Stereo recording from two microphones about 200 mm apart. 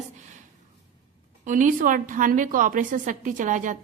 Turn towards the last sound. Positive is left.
turn(degrees=-40)  # may be behind; listen again after turning